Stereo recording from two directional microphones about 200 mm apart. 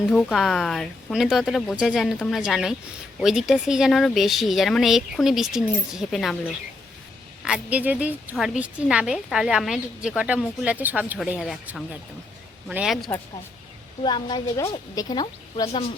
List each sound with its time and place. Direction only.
0.1 s a woman's voice: 5° left (ahead or behind)
7.4 s a woman's voice: 5° right (ahead or behind)
14.0 s a woman's voice: 20° left (ahead or behind)